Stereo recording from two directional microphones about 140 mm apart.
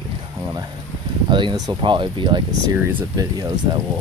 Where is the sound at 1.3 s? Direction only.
35° right (ahead or behind).